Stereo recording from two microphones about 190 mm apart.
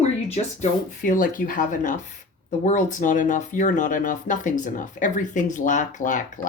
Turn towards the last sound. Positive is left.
turn(degrees=40)  # may be behind; listen again after turning